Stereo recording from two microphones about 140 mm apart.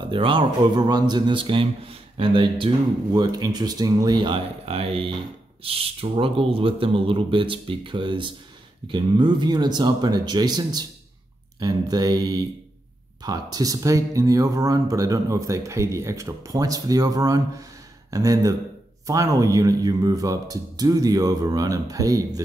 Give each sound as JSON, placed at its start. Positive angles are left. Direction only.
{"t": 0.1, "sound": "speech", "side_deg": -35}
{"t": 4.6, "sound": "speech", "side_deg": -45}